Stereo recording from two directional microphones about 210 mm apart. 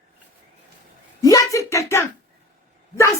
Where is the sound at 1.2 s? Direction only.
15° left (ahead or behind).